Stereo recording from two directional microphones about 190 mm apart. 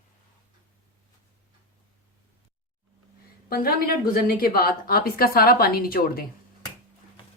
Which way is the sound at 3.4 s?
55° left (ahead or behind).